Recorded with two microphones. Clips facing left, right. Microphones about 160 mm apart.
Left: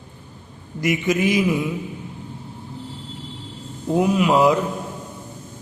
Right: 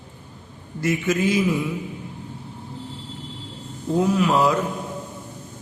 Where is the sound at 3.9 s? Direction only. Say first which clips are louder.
Left 2 dB; 15° left (ahead or behind).